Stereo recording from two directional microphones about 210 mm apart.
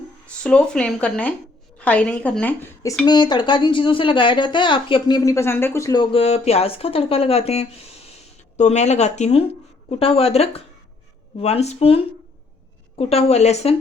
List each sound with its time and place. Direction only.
0.4 s a woman's voice: 5° left (ahead or behind)
3.1 s speech: 20° left (ahead or behind)